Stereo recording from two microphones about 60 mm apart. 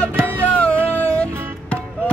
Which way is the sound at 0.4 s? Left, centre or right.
Left.